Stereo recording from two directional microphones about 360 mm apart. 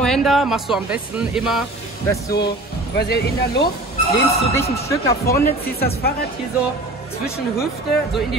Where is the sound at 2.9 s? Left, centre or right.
Left.